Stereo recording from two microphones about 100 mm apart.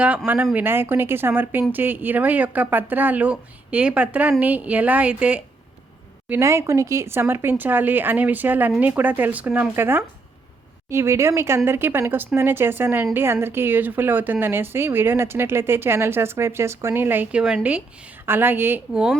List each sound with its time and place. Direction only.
0.5 s a woman's voice: 20° right (ahead or behind)
6.4 s a woman's voice: 30° right (ahead or behind)